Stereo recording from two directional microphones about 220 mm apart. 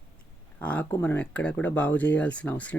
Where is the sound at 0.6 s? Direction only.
5° left (ahead or behind).